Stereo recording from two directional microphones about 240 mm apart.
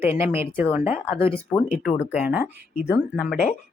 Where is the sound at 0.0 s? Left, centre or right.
Centre.